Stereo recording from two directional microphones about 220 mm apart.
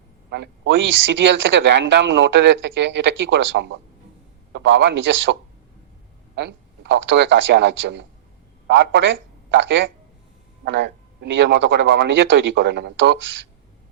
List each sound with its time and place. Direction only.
0.3 s a man's voice: 55° right (ahead or behind)